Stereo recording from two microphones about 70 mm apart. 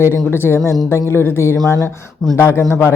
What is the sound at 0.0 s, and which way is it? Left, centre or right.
Speech, left.